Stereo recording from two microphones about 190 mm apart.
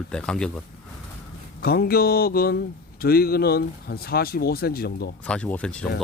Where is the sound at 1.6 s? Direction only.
55° left (ahead or behind).